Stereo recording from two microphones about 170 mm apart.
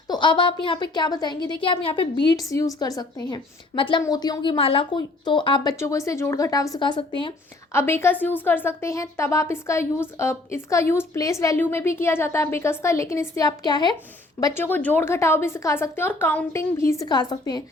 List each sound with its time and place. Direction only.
0.1 s a woman's voice: 30° left (ahead or behind)
2.5 s a woman's voice: 20° left (ahead or behind)
5.8 s a woman's voice: 20° left (ahead or behind)
7.7 s speech: 15° left (ahead or behind)
14.4 s speech: 15° left (ahead or behind)